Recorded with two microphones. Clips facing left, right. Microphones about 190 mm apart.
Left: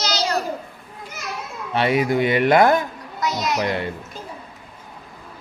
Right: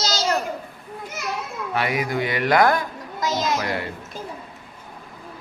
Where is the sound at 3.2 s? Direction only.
25° right (ahead or behind).